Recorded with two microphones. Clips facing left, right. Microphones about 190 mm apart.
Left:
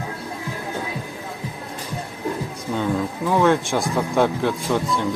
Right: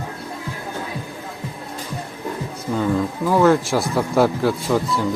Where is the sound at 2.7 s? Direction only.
Centre (ahead or behind).